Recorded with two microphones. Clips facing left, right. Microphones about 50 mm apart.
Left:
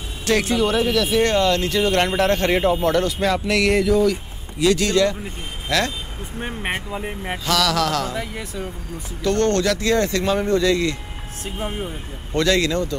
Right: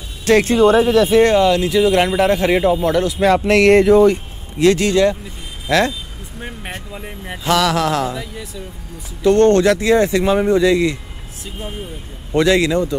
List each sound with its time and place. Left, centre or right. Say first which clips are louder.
0.3 s speech: right 7 dB; right
1.2 s speech: right 5 dB; centre
3.2 s speech: right 7 dB; right
4.8 s speech: right 4 dB; right
7.4 s speech: right 4 dB; right
8.1 s speech: even; left
9.2 s speech: right 7 dB; right
12.3 s speech: right 5 dB; centre